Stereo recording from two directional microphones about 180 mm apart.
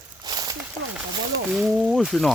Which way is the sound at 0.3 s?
20° right (ahead or behind).